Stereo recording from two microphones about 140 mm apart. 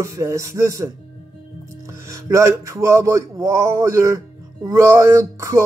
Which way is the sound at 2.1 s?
20° right (ahead or behind).